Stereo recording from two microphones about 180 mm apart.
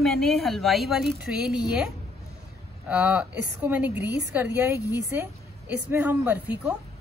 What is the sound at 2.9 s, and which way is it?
A woman's voice, 5° right (ahead or behind).